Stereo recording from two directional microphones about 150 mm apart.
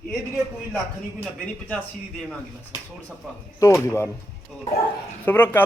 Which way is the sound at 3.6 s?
20° left (ahead or behind).